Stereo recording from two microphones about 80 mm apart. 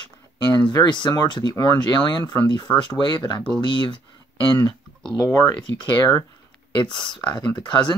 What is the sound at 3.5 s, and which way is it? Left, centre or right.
Speech, left.